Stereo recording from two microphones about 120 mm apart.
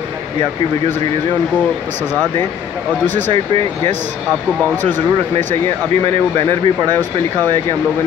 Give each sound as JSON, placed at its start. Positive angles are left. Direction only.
{"t": 6.3, "sound": "speech", "side_deg": -40}